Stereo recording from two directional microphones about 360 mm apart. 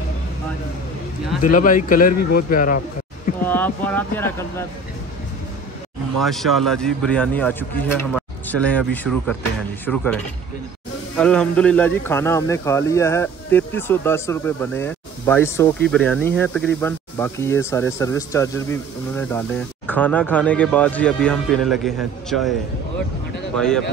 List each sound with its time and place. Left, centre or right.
1.4 s a man's voice: left
3.4 s speech: centre
6.1 s speech: centre